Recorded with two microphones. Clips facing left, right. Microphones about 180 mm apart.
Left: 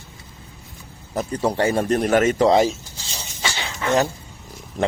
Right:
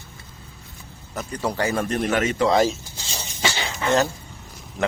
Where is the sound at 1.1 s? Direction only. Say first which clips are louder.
Left 5 dB; 30° left (ahead or behind).